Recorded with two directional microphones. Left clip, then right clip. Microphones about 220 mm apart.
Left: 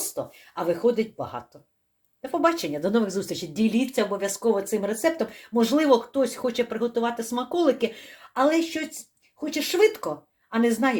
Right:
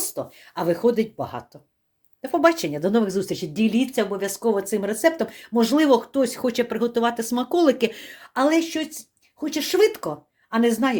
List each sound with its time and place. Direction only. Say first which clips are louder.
0.1 s speech: right 1 dB; 30° right (ahead or behind)